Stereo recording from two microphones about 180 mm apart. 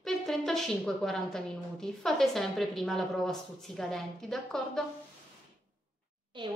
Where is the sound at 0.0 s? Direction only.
Centre (ahead or behind).